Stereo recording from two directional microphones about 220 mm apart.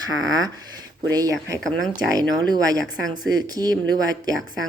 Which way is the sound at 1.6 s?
Centre (ahead or behind).